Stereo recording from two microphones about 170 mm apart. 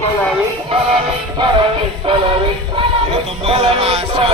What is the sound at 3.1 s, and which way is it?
Music, 40° right (ahead or behind).